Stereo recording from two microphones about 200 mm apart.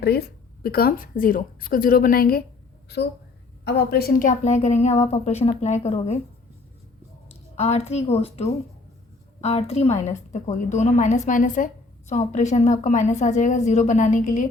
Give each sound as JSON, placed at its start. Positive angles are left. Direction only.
{"t": 0.0, "sound": "a woman's voice", "side_deg": 50}
{"t": 7.5, "sound": "a woman's voice", "side_deg": 30}